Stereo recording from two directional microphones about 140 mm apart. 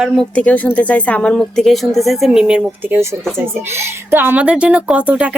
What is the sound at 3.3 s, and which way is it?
Speech, 15° right (ahead or behind).